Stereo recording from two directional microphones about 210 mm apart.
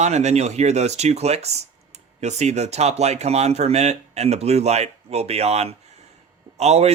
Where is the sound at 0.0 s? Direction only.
30° right (ahead or behind).